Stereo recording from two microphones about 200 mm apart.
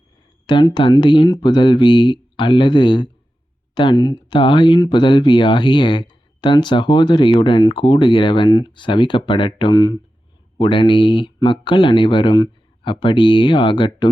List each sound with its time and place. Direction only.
0.4 s speech: 20° left (ahead or behind)